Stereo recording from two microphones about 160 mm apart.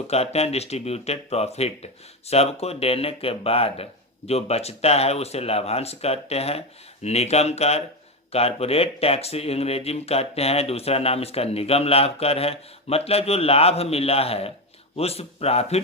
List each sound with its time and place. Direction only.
0.1 s speech: 40° left (ahead or behind)